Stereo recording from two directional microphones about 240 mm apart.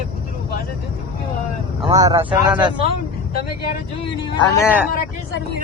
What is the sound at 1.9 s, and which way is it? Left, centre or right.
Speech, centre.